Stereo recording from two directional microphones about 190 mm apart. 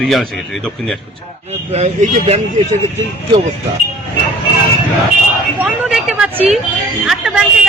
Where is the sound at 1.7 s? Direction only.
35° right (ahead or behind).